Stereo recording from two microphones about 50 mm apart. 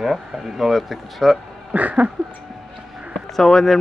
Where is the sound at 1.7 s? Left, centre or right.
Right.